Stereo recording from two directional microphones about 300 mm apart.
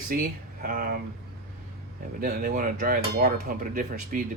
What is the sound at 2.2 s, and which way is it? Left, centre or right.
Cutlery, right.